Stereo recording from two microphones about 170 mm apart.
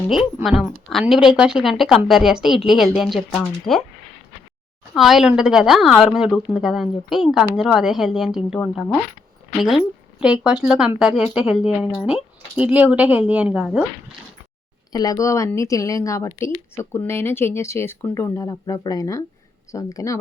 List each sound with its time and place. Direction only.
0.4 s speech: 5° right (ahead or behind)
4.9 s speech: centre (ahead or behind)
14.9 s speech: 20° left (ahead or behind)